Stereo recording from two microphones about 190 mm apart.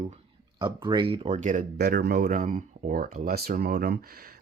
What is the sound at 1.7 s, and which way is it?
Speech, 60° right (ahead or behind).